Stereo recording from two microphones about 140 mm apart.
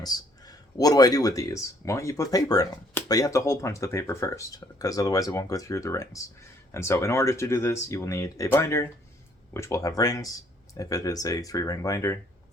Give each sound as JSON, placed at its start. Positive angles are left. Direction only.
{"t": 0.0, "sound": "speech", "side_deg": 25}